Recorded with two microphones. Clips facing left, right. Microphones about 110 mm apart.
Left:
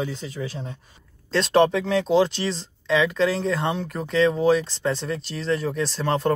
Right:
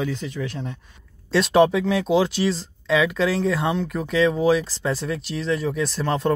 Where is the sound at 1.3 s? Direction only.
5° right (ahead or behind).